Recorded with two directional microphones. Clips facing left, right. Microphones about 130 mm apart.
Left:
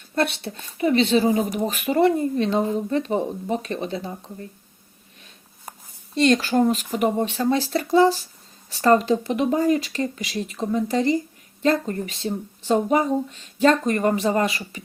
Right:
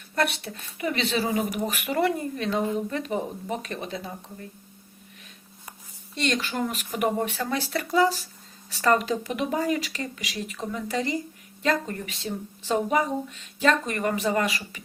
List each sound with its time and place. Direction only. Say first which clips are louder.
0.1 s speech: left 3 dB; 30° left (ahead or behind)
6.1 s speech: left 9 dB; 35° left (ahead or behind)